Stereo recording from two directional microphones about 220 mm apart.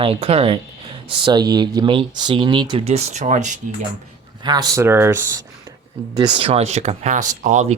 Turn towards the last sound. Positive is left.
turn(degrees=-35)  # may be behind; listen again after turning